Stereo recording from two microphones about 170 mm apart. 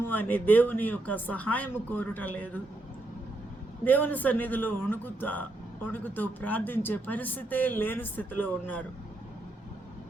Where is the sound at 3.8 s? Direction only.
10° left (ahead or behind).